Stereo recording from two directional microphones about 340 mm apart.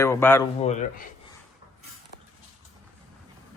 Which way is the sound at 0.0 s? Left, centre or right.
Centre.